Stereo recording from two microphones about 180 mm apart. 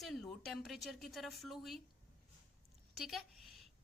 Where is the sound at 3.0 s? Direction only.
Centre (ahead or behind).